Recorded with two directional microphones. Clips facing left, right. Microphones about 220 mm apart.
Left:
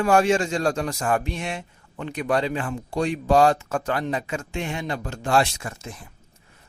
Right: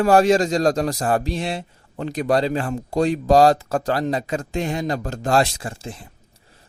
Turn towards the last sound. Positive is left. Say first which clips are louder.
# right 4 dB
turn(degrees=-30)  # may be behind; listen again after turning